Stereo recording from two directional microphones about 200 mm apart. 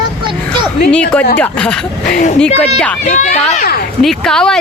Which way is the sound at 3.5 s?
45° left (ahead or behind).